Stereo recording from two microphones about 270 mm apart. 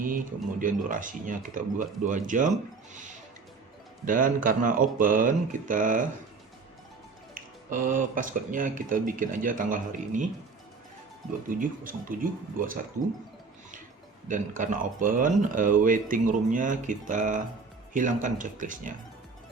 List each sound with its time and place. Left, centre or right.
0.6 s speech: right
2.9 s music: right
4.0 s speech: right
7.3 s speech: right
11.4 s speech: right
14.3 s speech: right